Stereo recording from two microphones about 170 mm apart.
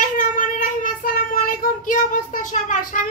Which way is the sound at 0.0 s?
50° left (ahead or behind).